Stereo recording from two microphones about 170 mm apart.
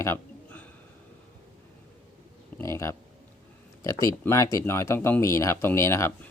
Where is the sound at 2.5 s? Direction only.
15° left (ahead or behind).